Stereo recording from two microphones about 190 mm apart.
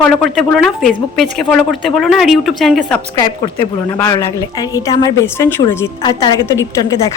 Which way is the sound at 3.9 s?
15° left (ahead or behind).